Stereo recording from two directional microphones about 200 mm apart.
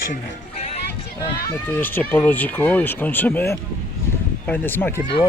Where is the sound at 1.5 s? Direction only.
10° left (ahead or behind).